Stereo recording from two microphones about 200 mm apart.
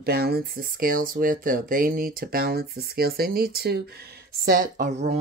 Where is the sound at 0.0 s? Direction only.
50° right (ahead or behind).